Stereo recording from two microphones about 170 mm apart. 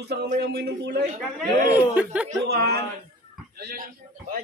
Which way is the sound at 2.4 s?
70° right (ahead or behind).